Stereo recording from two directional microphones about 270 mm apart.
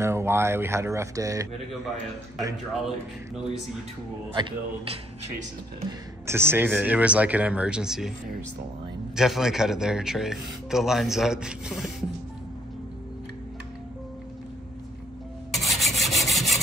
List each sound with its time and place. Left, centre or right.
0.0 s speech: centre
4.4 s speech: centre
9.1 s speech: centre
15.5 s rub: centre